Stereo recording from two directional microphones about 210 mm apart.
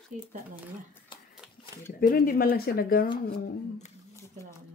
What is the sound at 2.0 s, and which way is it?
Speech, 45° left (ahead or behind).